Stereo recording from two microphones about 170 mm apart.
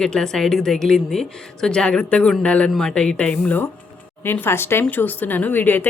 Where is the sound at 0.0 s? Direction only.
5° left (ahead or behind).